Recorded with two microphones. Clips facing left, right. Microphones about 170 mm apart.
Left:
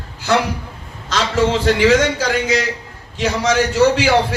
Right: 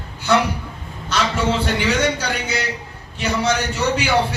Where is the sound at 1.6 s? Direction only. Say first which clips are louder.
Left 6 dB; 90° left.